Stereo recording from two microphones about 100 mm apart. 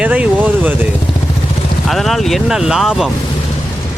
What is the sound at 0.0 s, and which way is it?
Vehicle, 15° right (ahead or behind).